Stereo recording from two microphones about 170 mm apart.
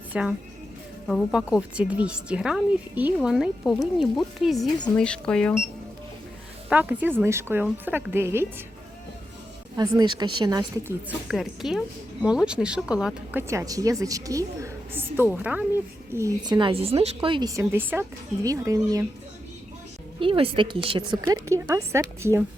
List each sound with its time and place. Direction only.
0.1 s speech: 5° right (ahead or behind)
6.7 s a woman's voice: 10° right (ahead or behind)
9.7 s a woman's voice: 25° right (ahead or behind)
11.3 s speech: centre (ahead or behind)
13.5 s a woman's voice: 20° right (ahead or behind)
20.1 s a woman's voice: 30° right (ahead or behind); by 22.4 s 15° right (ahead or behind)